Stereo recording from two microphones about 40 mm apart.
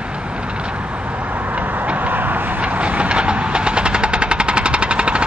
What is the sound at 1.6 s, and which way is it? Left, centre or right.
Tick-tock, right.